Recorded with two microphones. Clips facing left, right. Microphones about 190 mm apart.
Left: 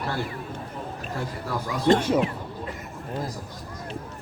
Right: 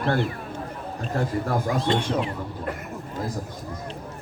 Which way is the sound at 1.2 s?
50° right (ahead or behind).